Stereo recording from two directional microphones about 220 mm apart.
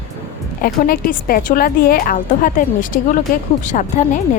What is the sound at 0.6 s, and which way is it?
A woman's voice, 40° left (ahead or behind).